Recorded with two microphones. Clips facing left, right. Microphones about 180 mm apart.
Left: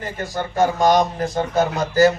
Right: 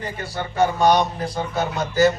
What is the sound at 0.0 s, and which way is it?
Speech, 45° left (ahead or behind).